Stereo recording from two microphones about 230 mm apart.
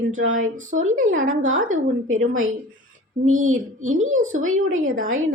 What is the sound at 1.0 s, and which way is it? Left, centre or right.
A woman's voice, right.